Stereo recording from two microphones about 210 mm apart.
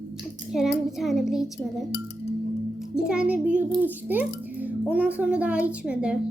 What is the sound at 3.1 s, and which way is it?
Child singing, 5° right (ahead or behind).